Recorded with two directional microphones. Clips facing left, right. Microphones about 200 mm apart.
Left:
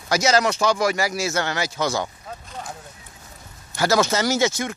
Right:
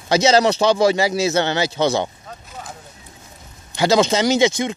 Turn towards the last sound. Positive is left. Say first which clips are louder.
# right 5 dB
turn(degrees=-15)  # may be behind; listen again after turning